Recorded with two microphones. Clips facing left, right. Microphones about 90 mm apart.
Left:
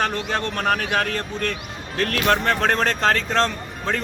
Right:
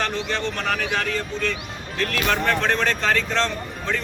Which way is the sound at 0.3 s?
50° left (ahead or behind).